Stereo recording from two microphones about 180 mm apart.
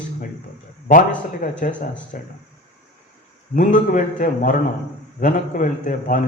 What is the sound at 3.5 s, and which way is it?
Speech, 45° left (ahead or behind).